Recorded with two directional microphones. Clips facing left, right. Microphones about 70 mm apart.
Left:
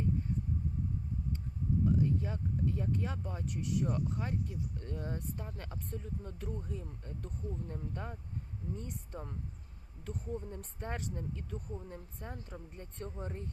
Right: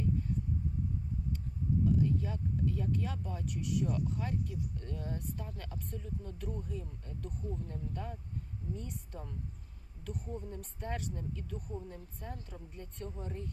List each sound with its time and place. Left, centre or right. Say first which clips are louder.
2.0 s speech: even; left